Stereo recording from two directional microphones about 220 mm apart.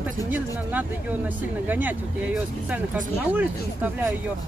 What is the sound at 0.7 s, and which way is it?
Speech, 10° right (ahead or behind).